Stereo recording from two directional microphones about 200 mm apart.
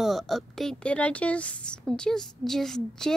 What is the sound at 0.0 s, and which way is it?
Speech, centre (ahead or behind).